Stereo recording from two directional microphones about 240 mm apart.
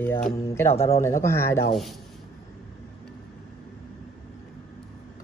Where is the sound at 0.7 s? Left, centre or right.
Left.